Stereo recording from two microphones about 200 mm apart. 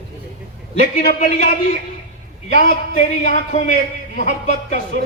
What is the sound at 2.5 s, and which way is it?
A man's voice, 40° left (ahead or behind).